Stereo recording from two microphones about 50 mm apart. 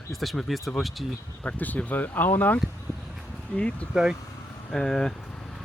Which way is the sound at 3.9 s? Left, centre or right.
Centre.